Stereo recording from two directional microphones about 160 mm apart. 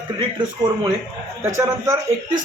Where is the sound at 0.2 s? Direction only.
30° right (ahead or behind).